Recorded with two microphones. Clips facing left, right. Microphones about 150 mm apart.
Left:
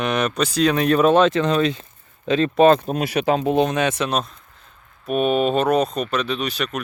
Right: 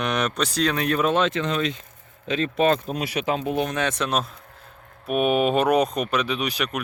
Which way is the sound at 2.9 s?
45° left (ahead or behind).